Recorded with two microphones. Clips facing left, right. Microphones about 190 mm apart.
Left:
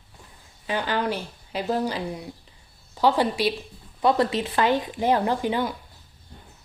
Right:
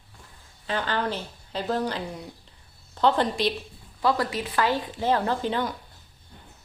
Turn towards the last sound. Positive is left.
turn(degrees=10)  # may be behind; listen again after turning